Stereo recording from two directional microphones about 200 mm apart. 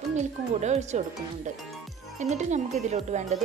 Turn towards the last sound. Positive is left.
turn(degrees=-35)  # may be behind; listen again after turning